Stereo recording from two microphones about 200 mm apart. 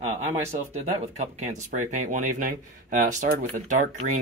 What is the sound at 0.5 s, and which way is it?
Speech, 35° right (ahead or behind).